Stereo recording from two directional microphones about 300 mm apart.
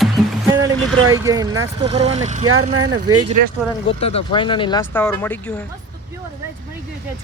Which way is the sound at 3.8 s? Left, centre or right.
Centre.